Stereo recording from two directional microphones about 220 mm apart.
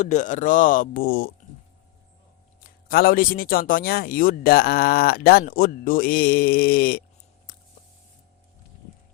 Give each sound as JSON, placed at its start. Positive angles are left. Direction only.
{"t": 0.0, "sound": "speech", "side_deg": 35}
{"t": 2.6, "sound": "speech", "side_deg": 40}
{"t": 7.5, "sound": "a sound", "side_deg": 40}